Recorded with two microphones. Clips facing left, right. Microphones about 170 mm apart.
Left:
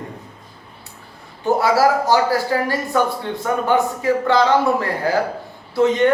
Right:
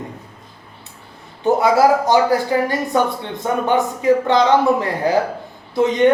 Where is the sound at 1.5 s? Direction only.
20° right (ahead or behind).